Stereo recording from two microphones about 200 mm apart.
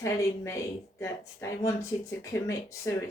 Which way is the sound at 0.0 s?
15° left (ahead or behind).